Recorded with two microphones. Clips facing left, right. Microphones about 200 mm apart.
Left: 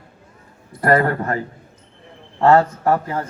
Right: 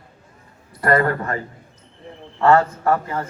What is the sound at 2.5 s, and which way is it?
Speech, 30° left (ahead or behind).